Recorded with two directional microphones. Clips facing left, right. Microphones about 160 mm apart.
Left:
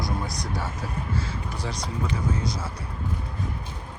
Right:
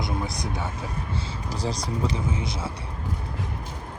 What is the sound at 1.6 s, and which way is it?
Speech, 35° right (ahead or behind).